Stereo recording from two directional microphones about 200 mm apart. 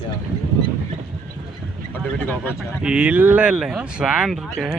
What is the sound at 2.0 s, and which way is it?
Speech, 5° left (ahead or behind).